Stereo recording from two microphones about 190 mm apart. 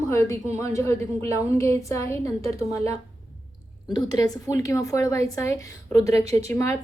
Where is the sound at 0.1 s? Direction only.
15° left (ahead or behind).